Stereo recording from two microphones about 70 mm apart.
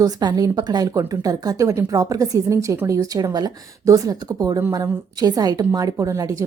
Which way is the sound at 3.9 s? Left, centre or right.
Right.